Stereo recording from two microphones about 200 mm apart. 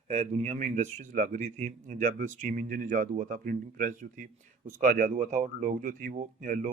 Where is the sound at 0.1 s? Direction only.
35° right (ahead or behind).